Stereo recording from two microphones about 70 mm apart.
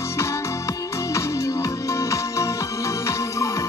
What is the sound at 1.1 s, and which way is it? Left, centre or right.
Music, left.